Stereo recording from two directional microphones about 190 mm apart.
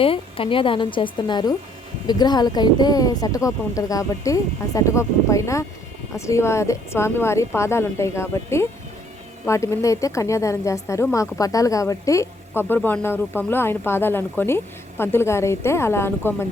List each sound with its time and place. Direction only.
0.0 s a woman's voice: 30° left (ahead or behind); by 16.5 s 10° left (ahead or behind)